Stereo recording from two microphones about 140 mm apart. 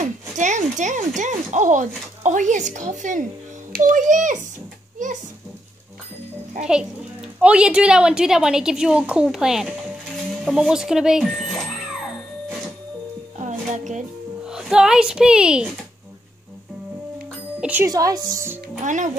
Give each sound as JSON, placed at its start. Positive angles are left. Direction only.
{"t": 0.0, "sound": "a child's voice", "side_deg": -65}
{"t": 6.6, "sound": "a child's voice", "side_deg": -5}
{"t": 13.4, "sound": "music", "side_deg": -60}
{"t": 14.4, "sound": "speech", "side_deg": -5}
{"t": 17.6, "sound": "speech", "side_deg": -10}
{"t": 17.8, "sound": "a woman's voice", "side_deg": -25}